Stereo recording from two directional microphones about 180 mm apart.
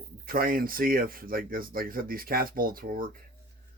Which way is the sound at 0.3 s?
55° right (ahead or behind).